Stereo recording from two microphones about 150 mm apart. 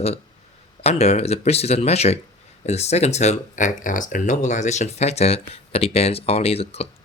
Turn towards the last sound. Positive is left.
turn(degrees=45)  # may be behind; listen again after turning